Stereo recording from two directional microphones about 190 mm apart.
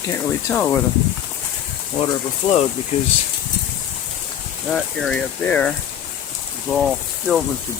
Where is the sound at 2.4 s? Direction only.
40° left (ahead or behind).